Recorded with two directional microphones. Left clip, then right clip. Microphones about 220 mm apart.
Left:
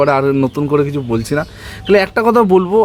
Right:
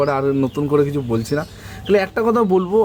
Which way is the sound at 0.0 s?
40° left (ahead or behind).